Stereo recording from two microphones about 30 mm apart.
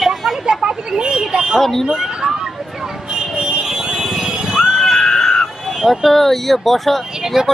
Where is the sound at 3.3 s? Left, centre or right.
Right.